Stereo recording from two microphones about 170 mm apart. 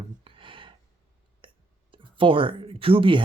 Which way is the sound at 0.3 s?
30° right (ahead or behind).